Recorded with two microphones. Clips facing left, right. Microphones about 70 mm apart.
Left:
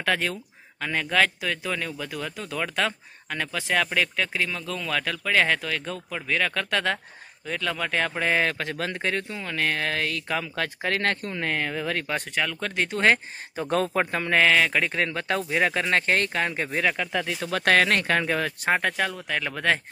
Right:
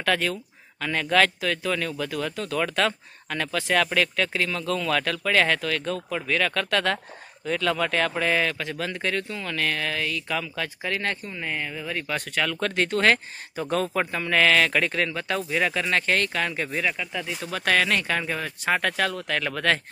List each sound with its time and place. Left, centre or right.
0.0 s speech: centre
8.5 s speech: left
8.9 s speech: left
10.5 s speech: left
12.4 s speech: centre
13.0 s speech: centre
13.7 s speech: left
14.3 s speech: centre
15.0 s speech: left
16.8 s speech: left
17.4 s speech: left
18.8 s speech: centre